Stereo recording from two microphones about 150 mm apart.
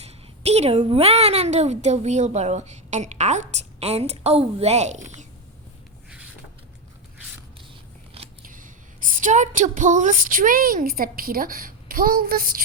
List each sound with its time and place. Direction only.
0.0 s a woman's voice: 45° right (ahead or behind)
8.4 s a woman's voice: 65° right (ahead or behind)